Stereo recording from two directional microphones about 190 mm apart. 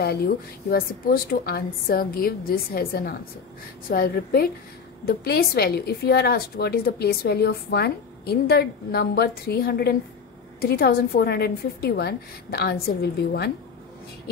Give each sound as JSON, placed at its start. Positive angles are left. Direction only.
{"t": 0.0, "sound": "a woman's voice", "side_deg": 55}